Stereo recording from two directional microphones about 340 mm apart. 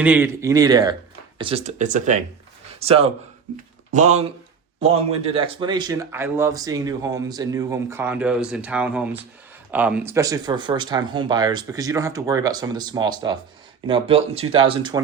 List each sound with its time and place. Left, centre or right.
0.0 s speech: centre